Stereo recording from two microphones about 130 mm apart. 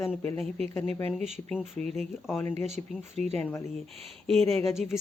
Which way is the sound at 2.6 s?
60° right (ahead or behind).